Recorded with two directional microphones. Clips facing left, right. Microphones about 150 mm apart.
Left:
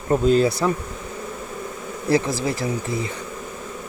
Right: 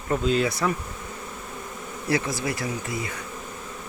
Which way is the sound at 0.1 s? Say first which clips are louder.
Left 6 dB; 35° left (ahead or behind).